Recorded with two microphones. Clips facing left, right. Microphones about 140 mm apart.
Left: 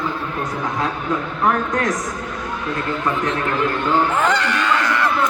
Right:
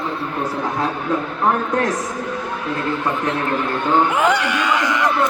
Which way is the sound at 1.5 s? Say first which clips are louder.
Right 1 dB; 30° right (ahead or behind).